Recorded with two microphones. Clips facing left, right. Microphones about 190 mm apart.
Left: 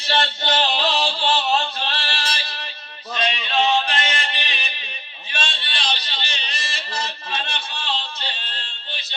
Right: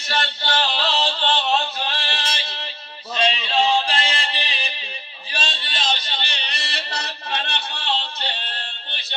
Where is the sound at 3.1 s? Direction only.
30° right (ahead or behind).